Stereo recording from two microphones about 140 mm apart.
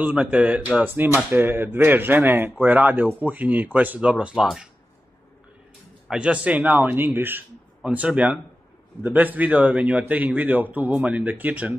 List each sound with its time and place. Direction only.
0.0 s a man's voice: 10° right (ahead or behind)
6.0 s a man's voice: 5° right (ahead or behind)